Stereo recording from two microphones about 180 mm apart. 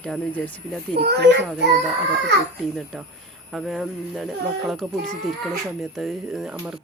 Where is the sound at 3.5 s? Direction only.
Centre (ahead or behind).